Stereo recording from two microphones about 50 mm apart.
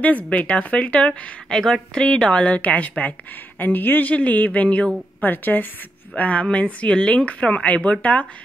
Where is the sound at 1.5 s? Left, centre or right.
Centre.